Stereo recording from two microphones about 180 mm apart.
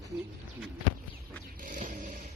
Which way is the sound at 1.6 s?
45° right (ahead or behind).